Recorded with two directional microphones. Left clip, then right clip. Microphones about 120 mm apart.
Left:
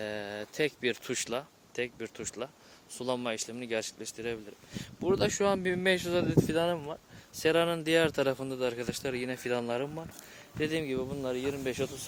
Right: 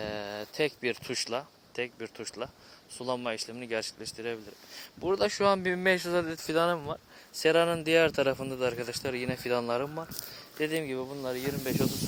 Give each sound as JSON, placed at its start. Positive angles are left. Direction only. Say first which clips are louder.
{"t": 0.0, "sound": "a sound", "louder": "right 1 dB", "side_deg": 25}
{"t": 1.0, "sound": "speech", "louder": "right 1 dB", "side_deg": 35}
{"t": 5.1, "sound": "speech", "louder": "right 3 dB", "side_deg": 20}